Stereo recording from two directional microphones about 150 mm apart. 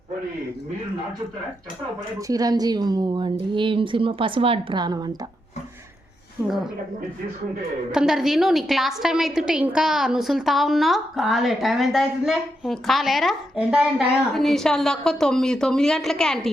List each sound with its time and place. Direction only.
2.1 s a woman's voice: 25° right (ahead or behind)
7.9 s a woman's voice: 5° right (ahead or behind)